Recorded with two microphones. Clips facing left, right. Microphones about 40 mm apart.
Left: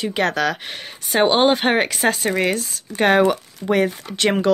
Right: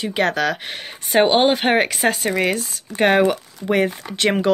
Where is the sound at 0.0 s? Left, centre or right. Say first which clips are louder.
Even; centre.